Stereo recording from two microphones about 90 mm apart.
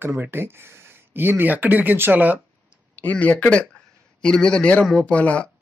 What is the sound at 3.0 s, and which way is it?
Speech, 15° left (ahead or behind).